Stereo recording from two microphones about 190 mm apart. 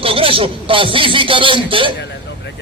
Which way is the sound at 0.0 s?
30° right (ahead or behind).